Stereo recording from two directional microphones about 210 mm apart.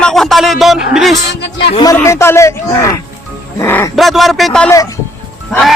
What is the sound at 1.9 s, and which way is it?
A man's voice, 15° left (ahead or behind).